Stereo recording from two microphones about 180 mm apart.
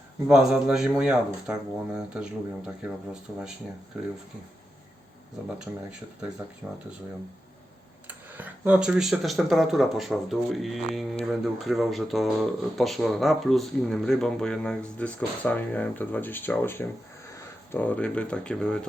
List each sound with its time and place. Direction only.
0.3 s speech: 5° right (ahead or behind)
5.7 s speech: 10° right (ahead or behind)
8.0 s speech: 10° right (ahead or behind)